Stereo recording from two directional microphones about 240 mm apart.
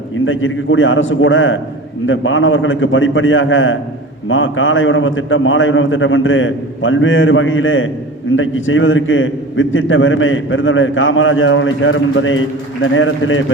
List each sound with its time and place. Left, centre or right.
0.3 s a man's voice: left